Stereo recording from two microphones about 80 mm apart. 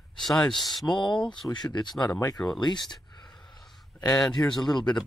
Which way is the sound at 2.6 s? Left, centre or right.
Left.